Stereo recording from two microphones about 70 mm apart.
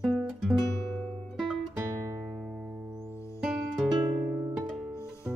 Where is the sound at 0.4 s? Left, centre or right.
Centre.